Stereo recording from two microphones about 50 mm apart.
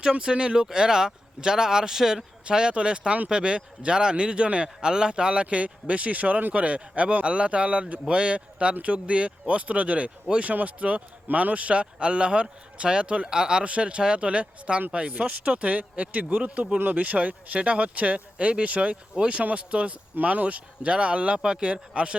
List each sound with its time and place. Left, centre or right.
0.1 s speech: centre